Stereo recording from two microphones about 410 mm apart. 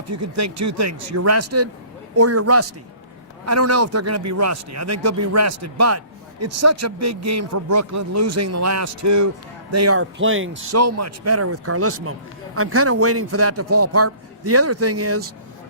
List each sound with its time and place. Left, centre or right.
0.1 s speech: right